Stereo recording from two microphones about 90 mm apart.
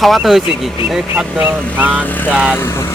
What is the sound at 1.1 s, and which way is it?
Speech, 20° right (ahead or behind).